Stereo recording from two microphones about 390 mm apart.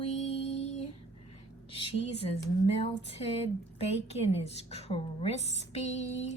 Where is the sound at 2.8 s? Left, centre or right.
Centre.